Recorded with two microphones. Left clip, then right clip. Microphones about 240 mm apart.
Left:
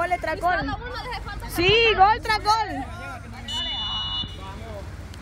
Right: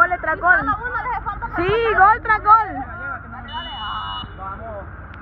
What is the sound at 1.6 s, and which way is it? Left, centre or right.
Speech, centre.